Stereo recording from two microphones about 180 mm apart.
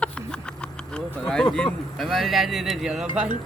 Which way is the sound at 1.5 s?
5° left (ahead or behind).